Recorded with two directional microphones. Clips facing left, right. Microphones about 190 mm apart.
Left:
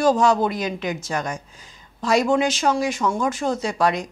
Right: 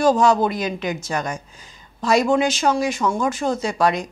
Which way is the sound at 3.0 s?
20° right (ahead or behind).